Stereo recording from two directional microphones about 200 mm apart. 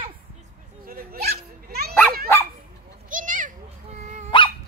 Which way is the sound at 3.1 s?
40° right (ahead or behind).